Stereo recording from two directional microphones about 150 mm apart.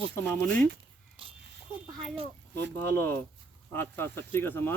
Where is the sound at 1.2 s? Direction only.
35° right (ahead or behind).